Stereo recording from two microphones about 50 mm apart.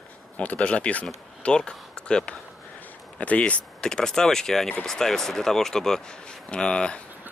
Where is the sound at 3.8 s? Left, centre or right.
Centre.